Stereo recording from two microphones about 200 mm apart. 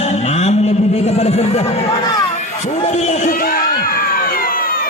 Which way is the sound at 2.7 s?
35° left (ahead or behind).